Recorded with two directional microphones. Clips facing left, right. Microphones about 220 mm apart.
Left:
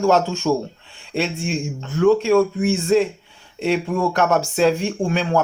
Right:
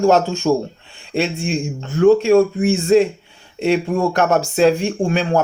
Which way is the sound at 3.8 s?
35° right (ahead or behind).